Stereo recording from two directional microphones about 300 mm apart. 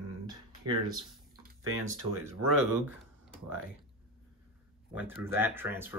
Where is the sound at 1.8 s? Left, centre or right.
Centre.